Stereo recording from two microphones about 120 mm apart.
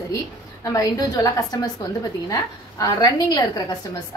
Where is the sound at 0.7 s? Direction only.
30° left (ahead or behind).